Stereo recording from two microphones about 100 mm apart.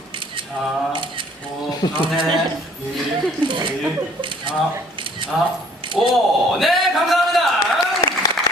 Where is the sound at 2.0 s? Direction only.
55° right (ahead or behind).